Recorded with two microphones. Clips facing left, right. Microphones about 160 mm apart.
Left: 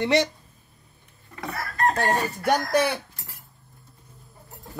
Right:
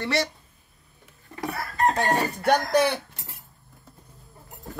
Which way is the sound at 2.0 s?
5° left (ahead or behind).